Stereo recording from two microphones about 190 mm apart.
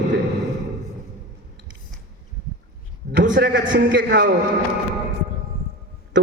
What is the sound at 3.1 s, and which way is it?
A man's voice, 70° right (ahead or behind).